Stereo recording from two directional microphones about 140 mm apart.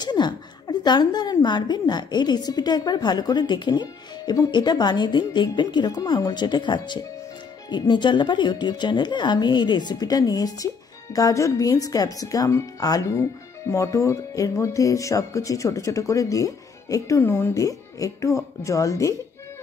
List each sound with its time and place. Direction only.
0.0 s a woman's voice: 30° left (ahead or behind)